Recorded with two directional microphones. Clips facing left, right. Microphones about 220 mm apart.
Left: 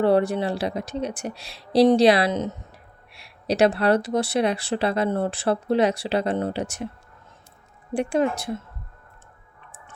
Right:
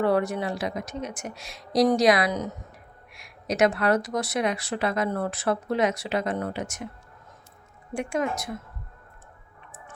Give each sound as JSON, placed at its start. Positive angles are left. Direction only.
{"t": 0.0, "sound": "speech", "side_deg": 30}
{"t": 7.9, "sound": "speech", "side_deg": 30}